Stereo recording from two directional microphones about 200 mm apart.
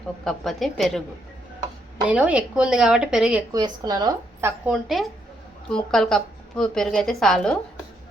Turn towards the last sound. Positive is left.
turn(degrees=5)  # may be behind; listen again after turning